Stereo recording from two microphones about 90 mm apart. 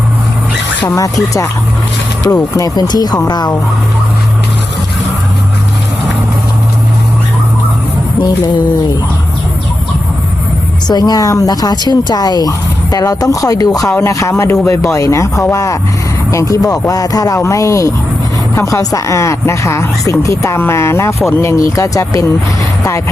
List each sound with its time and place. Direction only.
0.9 s a woman's voice: 40° left (ahead or behind)
10.8 s a woman's voice: 50° left (ahead or behind)